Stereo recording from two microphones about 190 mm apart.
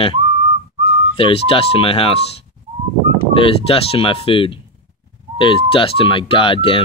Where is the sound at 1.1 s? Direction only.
30° left (ahead or behind).